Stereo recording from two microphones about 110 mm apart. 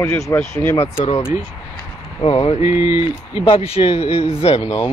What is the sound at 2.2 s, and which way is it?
Speech, 55° left (ahead or behind).